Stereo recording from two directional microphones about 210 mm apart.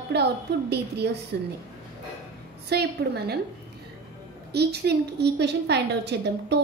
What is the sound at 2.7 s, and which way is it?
Speech, 50° right (ahead or behind).